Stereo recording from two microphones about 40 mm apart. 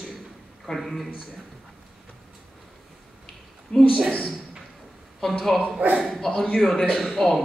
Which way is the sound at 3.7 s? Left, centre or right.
Left.